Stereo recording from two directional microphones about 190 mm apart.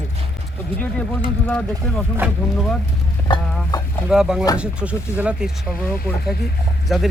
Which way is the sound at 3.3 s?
25° left (ahead or behind).